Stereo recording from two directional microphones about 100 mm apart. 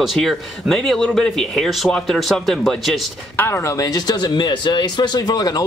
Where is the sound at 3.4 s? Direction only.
25° left (ahead or behind).